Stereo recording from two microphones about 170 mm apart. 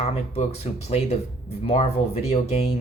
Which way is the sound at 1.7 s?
35° left (ahead or behind).